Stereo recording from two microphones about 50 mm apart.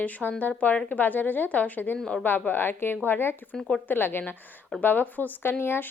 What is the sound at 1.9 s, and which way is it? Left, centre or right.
Speech, centre.